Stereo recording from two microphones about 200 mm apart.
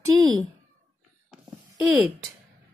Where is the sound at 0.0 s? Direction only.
15° right (ahead or behind).